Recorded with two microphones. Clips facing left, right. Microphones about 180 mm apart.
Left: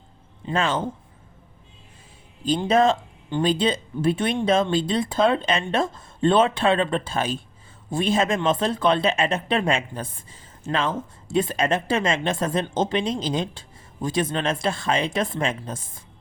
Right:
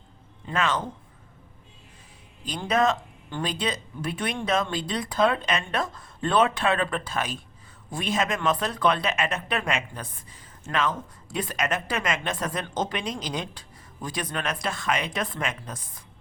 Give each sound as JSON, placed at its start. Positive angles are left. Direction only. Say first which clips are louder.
{"t": 0.4, "sound": "speech", "louder": "left 3 dB", "side_deg": 30}
{"t": 2.4, "sound": "speech", "louder": "left 5 dB", "side_deg": 30}